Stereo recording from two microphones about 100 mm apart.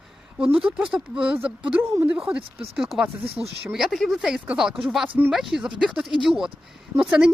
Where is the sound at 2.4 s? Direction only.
65° right (ahead or behind).